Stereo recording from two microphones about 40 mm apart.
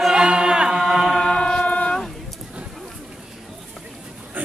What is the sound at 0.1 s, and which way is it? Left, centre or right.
Chant, right.